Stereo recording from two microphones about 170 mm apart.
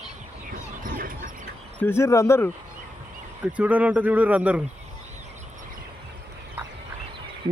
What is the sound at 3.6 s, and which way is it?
Speech, 10° right (ahead or behind).